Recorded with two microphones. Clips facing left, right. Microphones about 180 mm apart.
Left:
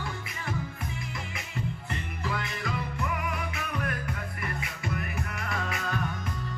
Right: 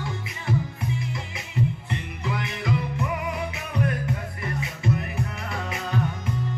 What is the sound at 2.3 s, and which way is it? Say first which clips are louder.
Music: right 6 dB; 20° right (ahead or behind).